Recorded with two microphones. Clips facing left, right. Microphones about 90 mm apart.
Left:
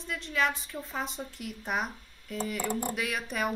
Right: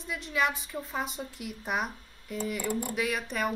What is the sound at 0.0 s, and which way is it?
A woman's voice, 5° right (ahead or behind).